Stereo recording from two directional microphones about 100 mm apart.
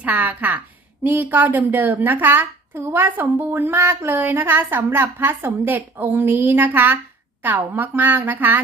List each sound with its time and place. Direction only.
0.0 s a woman's voice: 15° right (ahead or behind)